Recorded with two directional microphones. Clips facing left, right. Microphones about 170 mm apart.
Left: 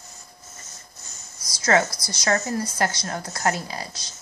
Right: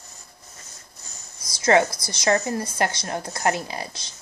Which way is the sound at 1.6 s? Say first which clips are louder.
Right 2 dB; 20° right (ahead or behind).